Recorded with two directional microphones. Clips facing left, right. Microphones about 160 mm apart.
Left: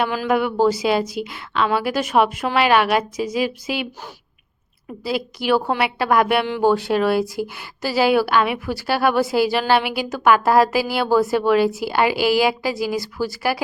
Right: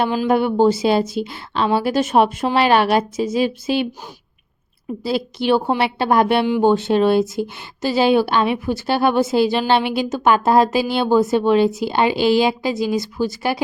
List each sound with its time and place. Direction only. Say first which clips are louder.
0.0 s a woman's voice: right 3 dB; 20° right (ahead or behind)
0.3 s a woman's voice: right 2 dB; 30° right (ahead or behind)
5.0 s a woman's voice: right 2 dB; 30° right (ahead or behind)